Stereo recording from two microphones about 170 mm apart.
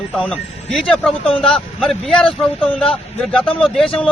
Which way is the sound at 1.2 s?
35° left (ahead or behind).